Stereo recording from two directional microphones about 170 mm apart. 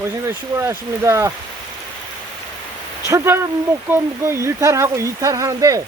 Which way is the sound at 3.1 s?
15° right (ahead or behind).